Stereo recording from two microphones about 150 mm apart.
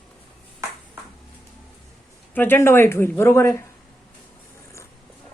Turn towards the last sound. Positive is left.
turn(degrees=15)  # may be behind; listen again after turning